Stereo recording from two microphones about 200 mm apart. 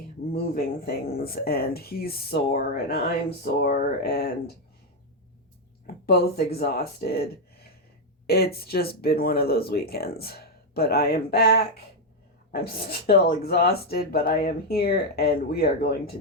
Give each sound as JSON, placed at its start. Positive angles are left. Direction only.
{"t": 0.5, "sound": "speech", "side_deg": 50}
{"t": 6.1, "sound": "speech", "side_deg": 50}